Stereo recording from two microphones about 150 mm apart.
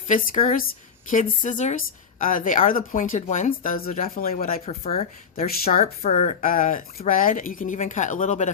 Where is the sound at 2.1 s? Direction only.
65° left (ahead or behind).